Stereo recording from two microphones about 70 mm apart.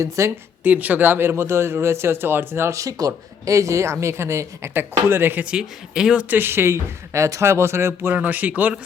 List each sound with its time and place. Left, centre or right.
0.0 s speech: right
0.6 s speech: right
5.5 s speech: centre
6.2 s speech: right
8.1 s speech: right